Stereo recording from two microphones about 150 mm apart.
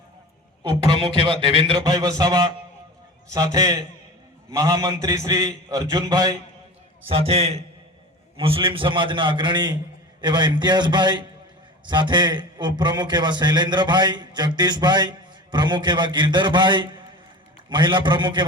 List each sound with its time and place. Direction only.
0.9 s a man's voice: 35° right (ahead or behind)
7.1 s a man's voice: 45° right (ahead or behind)